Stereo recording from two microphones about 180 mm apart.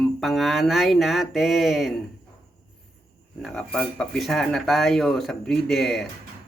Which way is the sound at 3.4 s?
Centre (ahead or behind).